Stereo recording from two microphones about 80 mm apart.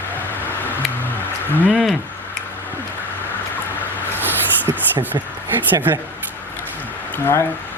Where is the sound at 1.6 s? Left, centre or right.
Centre.